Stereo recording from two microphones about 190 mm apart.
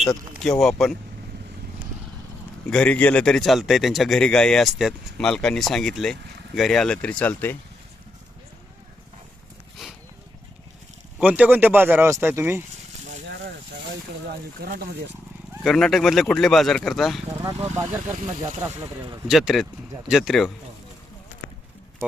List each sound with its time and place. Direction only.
0.4 s speech: centre (ahead or behind)
2.6 s speech: 5° left (ahead or behind)
11.2 s speech: 10° right (ahead or behind)
14.6 s speech: 55° right (ahead or behind)
15.6 s speech: centre (ahead or behind)
17.4 s speech: 15° right (ahead or behind)
19.3 s speech: centre (ahead or behind)